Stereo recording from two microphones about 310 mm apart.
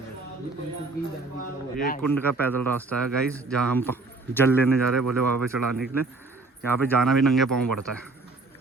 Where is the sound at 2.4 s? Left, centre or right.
Centre.